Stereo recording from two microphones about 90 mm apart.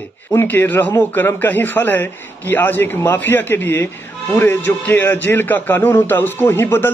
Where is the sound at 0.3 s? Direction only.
25° left (ahead or behind).